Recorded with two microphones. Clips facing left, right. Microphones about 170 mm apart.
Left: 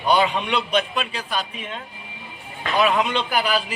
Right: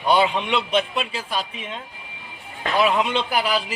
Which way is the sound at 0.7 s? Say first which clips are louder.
Even; 25° right (ahead or behind).